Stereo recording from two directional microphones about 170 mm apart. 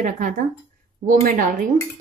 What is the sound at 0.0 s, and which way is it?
A woman's voice, 45° right (ahead or behind).